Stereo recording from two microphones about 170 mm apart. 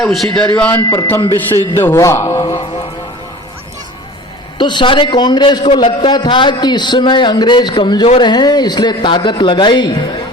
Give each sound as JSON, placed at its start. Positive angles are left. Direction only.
{"t": 0.0, "sound": "a man's voice", "side_deg": 0}
{"t": 4.5, "sound": "a man's voice", "side_deg": 25}